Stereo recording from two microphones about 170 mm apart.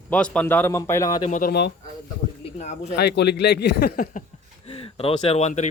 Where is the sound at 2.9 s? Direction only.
75° left (ahead or behind); by 4.2 s 55° left (ahead or behind).